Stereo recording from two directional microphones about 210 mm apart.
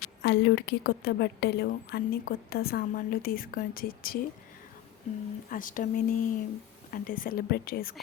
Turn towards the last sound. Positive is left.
turn(degrees=45)  # may be behind; listen again after turning